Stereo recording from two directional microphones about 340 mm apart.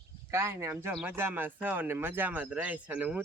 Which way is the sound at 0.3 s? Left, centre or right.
Centre.